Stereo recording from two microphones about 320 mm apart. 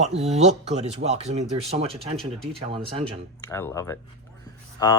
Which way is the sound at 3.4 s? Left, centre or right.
Centre.